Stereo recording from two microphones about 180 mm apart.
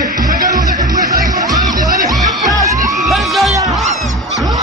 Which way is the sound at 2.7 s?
20° right (ahead or behind).